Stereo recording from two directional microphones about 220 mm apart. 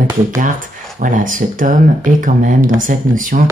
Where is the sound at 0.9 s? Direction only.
35° right (ahead or behind).